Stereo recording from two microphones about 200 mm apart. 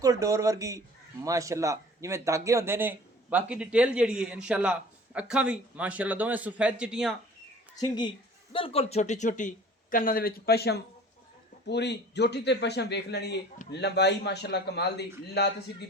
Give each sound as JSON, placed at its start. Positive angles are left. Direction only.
{"t": 0.0, "sound": "speech", "side_deg": -15}
{"t": 7.8, "sound": "speech", "side_deg": 20}